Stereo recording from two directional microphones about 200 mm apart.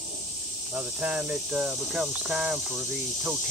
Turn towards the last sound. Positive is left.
turn(degrees=-5)  # may be behind; listen again after turning